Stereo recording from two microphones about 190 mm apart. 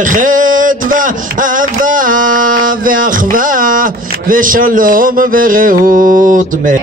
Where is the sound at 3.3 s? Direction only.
45° right (ahead or behind).